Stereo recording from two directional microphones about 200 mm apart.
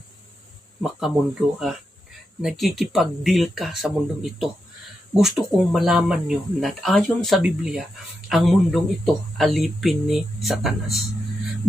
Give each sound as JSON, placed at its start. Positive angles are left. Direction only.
{"t": 0.8, "sound": "speech", "side_deg": 0}